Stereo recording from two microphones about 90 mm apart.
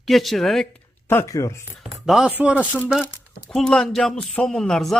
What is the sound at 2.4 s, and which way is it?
Speech, 15° right (ahead or behind).